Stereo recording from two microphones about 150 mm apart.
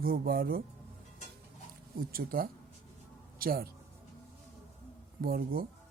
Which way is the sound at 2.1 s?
75° right (ahead or behind).